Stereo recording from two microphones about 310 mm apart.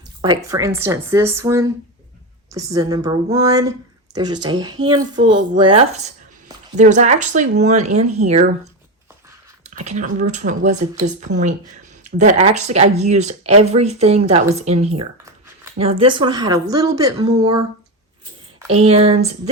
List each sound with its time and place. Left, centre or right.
0.2 s a woman's voice: centre
9.6 s speech: right
12.0 s a woman's voice: right
18.7 s speech: centre